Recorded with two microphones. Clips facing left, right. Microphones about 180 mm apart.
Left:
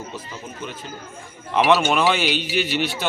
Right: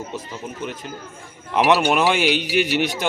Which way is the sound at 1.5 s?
10° right (ahead or behind).